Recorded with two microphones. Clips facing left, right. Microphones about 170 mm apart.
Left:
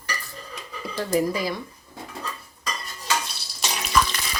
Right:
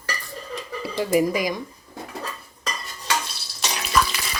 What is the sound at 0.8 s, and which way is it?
Speech, 10° right (ahead or behind).